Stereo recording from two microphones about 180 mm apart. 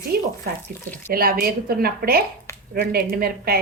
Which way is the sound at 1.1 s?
55° right (ahead or behind).